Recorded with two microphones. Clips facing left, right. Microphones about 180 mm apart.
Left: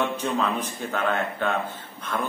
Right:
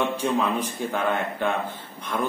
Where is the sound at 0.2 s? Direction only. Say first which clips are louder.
Right 2 dB; 10° right (ahead or behind).